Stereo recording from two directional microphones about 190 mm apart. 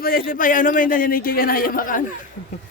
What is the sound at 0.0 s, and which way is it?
A man's voice, 50° left (ahead or behind).